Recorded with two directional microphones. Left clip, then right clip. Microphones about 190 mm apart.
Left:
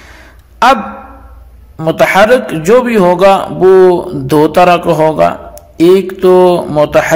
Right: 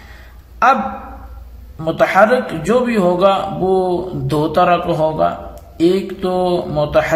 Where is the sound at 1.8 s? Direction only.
35° left (ahead or behind).